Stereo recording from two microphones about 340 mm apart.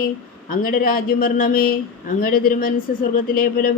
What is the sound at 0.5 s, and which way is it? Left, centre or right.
Speech, left.